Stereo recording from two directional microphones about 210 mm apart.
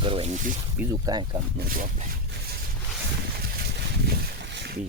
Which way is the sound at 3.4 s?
50° right (ahead or behind).